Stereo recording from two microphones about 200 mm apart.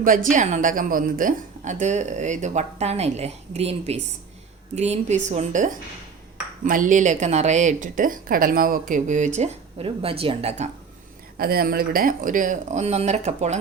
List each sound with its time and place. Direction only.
0.0 s a woman's voice: 40° right (ahead or behind)
11.3 s a woman's voice: 50° right (ahead or behind)